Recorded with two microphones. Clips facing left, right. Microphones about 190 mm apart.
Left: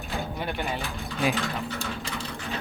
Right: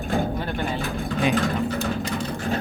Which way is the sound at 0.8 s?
50° right (ahead or behind).